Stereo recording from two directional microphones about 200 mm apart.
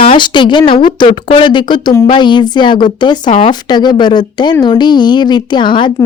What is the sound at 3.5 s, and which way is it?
A woman's voice, 20° left (ahead or behind).